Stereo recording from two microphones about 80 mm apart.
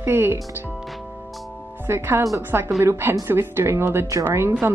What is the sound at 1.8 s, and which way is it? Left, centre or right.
Speech, right.